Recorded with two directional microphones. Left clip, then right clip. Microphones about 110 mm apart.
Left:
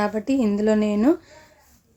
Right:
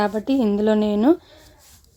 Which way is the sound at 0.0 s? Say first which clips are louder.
Right 2 dB; 15° right (ahead or behind).